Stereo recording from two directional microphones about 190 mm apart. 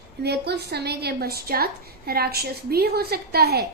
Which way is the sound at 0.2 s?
60° right (ahead or behind).